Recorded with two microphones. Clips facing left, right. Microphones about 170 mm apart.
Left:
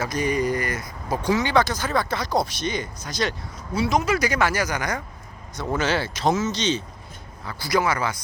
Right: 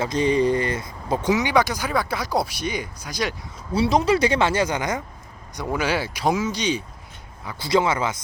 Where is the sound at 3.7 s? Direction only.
30° right (ahead or behind).